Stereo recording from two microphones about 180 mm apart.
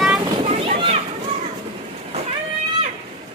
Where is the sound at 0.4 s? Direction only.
35° right (ahead or behind).